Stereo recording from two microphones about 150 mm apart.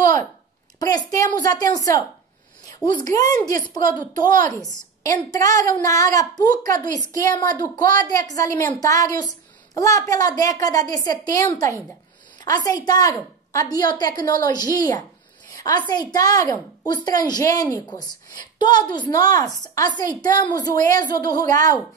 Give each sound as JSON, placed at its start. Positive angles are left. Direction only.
{"t": 0.7, "sound": "a woman's voice", "side_deg": 25}
{"t": 2.7, "sound": "a sound", "side_deg": 25}
{"t": 3.2, "sound": "a woman's voice", "side_deg": 25}
{"t": 5.0, "sound": "a woman's voice", "side_deg": 25}
{"t": 12.4, "sound": "a woman's voice", "side_deg": 25}
{"t": 15.5, "sound": "a sound", "side_deg": 25}
{"t": 15.9, "sound": "a woman's voice", "side_deg": 25}